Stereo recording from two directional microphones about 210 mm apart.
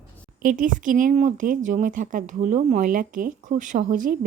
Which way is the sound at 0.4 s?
40° right (ahead or behind).